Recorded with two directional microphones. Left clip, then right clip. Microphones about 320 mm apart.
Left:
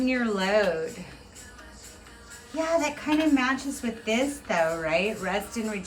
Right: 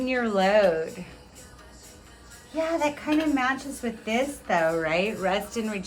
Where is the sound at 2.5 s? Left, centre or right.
Centre.